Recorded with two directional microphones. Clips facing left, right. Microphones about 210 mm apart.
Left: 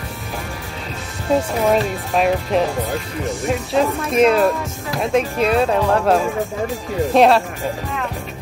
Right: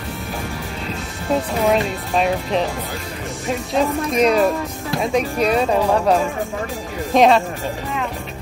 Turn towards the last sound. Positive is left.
turn(degrees=0)  # may be behind; listen again after turning